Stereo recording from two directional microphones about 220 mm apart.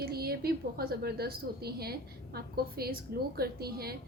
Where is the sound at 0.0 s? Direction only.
45° right (ahead or behind).